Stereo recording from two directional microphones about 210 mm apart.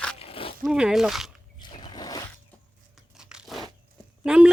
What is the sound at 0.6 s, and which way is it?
Speech, 5° right (ahead or behind).